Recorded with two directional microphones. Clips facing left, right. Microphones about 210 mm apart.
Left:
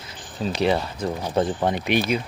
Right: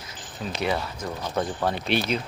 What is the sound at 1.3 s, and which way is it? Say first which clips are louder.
Speech: left 4 dB; 20° left (ahead or behind).